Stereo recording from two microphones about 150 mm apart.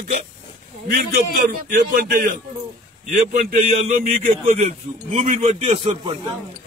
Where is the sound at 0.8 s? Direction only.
80° right.